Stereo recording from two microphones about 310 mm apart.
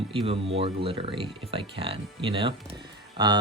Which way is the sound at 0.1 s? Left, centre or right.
Centre.